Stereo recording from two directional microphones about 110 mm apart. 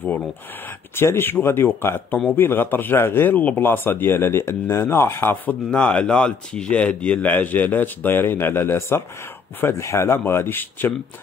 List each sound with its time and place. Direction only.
0.9 s a man's voice: 20° left (ahead or behind)